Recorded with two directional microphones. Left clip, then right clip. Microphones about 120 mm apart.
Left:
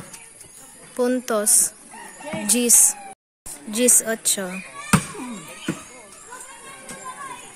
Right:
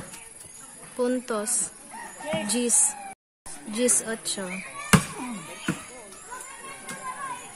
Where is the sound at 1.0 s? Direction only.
20° left (ahead or behind).